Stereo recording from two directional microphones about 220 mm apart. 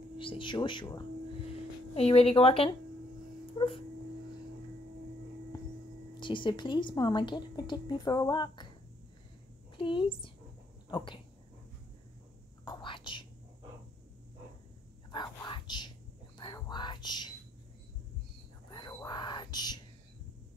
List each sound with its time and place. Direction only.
0.2 s speech: 20° left (ahead or behind)
5.5 s a sound: 20° left (ahead or behind)
6.1 s speech: 20° left (ahead or behind)
9.8 s a woman's voice: 25° left (ahead or behind)
12.6 s whispering: 20° left (ahead or behind)
15.0 s whispering: 20° left (ahead or behind)
18.7 s whispering: 15° left (ahead or behind)